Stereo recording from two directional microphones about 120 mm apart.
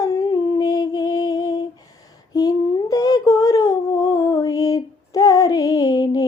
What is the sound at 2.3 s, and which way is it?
Humming, 30° left (ahead or behind).